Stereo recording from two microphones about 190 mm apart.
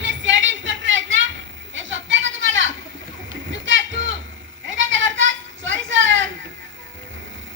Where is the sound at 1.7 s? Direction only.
80° right.